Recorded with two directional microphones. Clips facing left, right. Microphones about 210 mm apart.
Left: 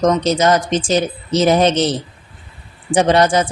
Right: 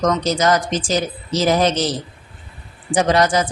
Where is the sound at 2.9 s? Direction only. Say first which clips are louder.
Left 3 dB; 25° left (ahead or behind).